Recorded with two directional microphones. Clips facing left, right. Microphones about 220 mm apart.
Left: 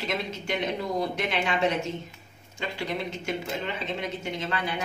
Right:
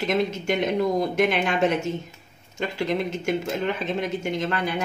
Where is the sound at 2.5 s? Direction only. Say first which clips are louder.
Right 6 dB; 45° right (ahead or behind).